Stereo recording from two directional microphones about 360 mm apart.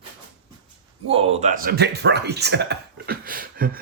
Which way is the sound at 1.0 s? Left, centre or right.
Centre.